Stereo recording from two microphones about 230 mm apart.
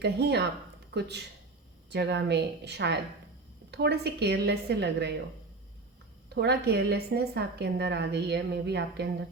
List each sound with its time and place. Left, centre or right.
0.0 s a woman's voice: right
6.2 s a woman's voice: right